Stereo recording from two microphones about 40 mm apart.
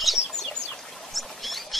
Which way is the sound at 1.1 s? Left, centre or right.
Centre.